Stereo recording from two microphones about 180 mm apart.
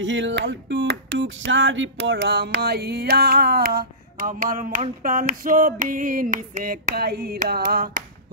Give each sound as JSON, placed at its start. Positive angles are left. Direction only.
{"t": 0.0, "sound": "music", "side_deg": -90}
{"t": 4.8, "sound": "a sound", "side_deg": -45}
{"t": 7.4, "sound": "music", "side_deg": -60}